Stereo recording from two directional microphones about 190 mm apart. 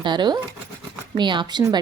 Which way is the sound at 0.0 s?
25° right (ahead or behind).